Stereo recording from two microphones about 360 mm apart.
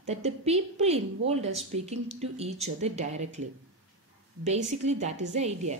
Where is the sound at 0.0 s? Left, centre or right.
Centre.